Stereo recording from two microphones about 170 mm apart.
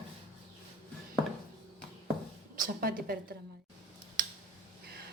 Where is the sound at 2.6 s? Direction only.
60° right (ahead or behind).